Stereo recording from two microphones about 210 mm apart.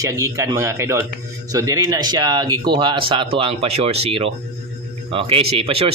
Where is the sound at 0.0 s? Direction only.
15° right (ahead or behind).